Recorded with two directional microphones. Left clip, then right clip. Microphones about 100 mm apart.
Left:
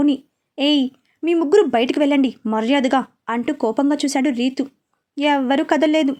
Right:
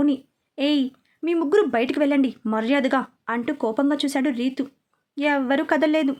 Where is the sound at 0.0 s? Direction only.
20° left (ahead or behind).